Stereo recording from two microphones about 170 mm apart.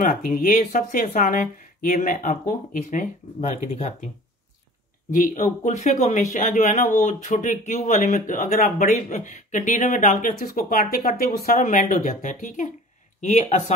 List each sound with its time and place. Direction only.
0.0 s speech: 55° left (ahead or behind)
5.1 s speech: 50° left (ahead or behind)